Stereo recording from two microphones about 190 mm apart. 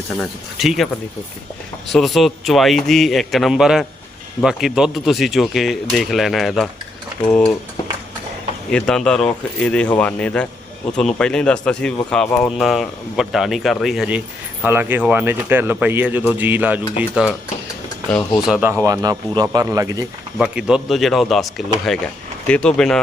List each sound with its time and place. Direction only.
0.2 s speech: centre (ahead or behind)
1.9 s speech: centre (ahead or behind)
8.7 s speech: 5° left (ahead or behind)
18.1 s speech: 20° left (ahead or behind)
18.4 s speech: 5° right (ahead or behind)
18.9 s speech: 20° right (ahead or behind)
20.4 s speech: 5° right (ahead or behind)